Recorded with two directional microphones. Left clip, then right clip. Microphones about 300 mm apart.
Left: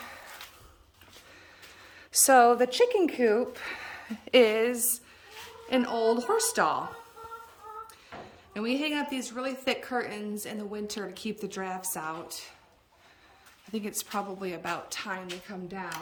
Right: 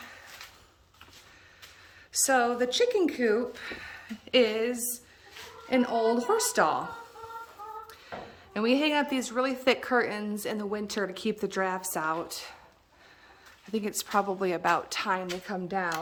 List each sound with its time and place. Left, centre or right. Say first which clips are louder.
0.0 s a sound: left 2 dB; centre
2.1 s a woman's voice: left 6 dB; centre
8.5 s a woman's voice: right 5 dB; centre
13.7 s a woman's voice: right 6 dB; centre